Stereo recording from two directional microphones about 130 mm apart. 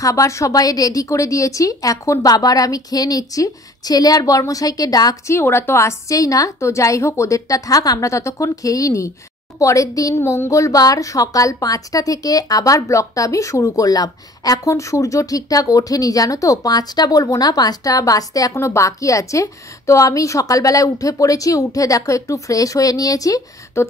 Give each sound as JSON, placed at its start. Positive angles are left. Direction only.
{"t": 0.0, "sound": "a woman's voice", "side_deg": 25}